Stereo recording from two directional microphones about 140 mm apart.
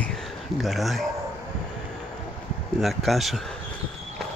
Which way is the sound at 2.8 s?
Centre (ahead or behind).